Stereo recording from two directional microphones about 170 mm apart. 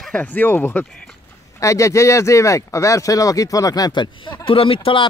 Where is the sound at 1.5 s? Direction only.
20° left (ahead or behind).